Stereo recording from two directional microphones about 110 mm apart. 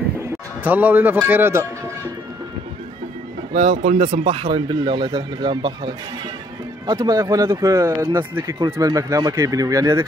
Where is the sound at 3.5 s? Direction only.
90° right; by 6.0 s 50° right (ahead or behind).